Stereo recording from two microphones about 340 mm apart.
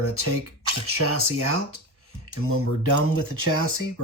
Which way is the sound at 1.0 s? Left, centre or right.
Right.